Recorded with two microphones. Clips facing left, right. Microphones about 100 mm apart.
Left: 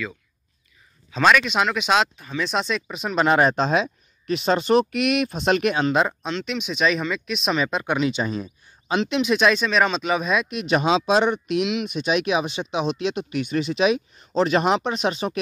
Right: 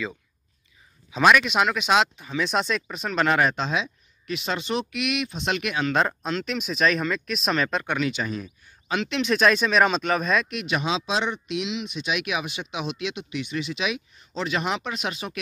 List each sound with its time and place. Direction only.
1.1 s speech: 5° right (ahead or behind)
2.7 s speech: 5° left (ahead or behind)
3.2 s speech: 25° left (ahead or behind)
5.9 s speech: centre (ahead or behind); by 9.2 s 25° left (ahead or behind)
9.2 s speech: 10° left (ahead or behind)
9.6 s speech: 5° right (ahead or behind)
10.5 s speech: 30° left (ahead or behind)
10.8 s speech: 45° left (ahead or behind); by 15.4 s 30° left (ahead or behind)